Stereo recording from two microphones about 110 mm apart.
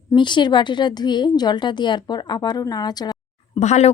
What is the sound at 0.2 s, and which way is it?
A woman's voice, 45° left (ahead or behind).